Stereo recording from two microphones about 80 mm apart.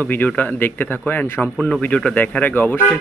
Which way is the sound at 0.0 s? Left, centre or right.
Left.